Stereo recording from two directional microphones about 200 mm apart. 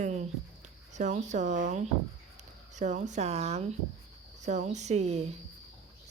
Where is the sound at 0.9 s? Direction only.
35° right (ahead or behind).